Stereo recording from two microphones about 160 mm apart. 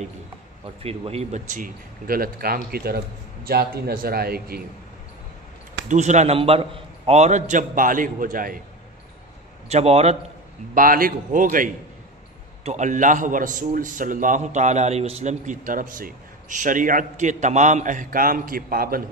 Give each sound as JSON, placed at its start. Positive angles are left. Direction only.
{"t": 0.8, "sound": "a man's voice", "side_deg": -40}
{"t": 5.9, "sound": "a man's voice", "side_deg": -45}
{"t": 9.7, "sound": "a man's voice", "side_deg": -40}
{"t": 10.7, "sound": "a man's voice", "side_deg": -60}